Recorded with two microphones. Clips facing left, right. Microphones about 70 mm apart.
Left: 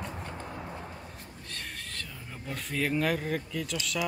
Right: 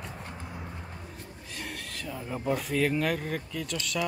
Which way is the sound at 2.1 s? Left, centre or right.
Centre.